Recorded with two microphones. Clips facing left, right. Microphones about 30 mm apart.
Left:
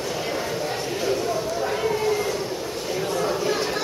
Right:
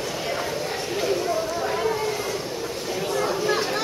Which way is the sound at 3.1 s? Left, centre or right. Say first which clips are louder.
Right 1 dB; centre.